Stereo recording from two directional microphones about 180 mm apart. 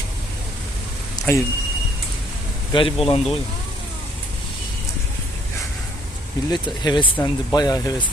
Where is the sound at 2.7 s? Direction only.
30° left (ahead or behind).